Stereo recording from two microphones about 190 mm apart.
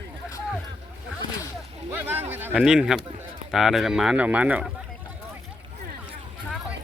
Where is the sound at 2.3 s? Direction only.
10° right (ahead or behind).